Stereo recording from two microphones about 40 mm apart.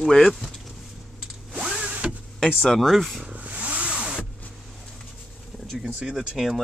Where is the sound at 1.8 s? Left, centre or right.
Right.